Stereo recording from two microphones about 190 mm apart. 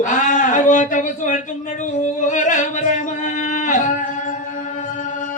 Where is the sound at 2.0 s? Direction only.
40° left (ahead or behind).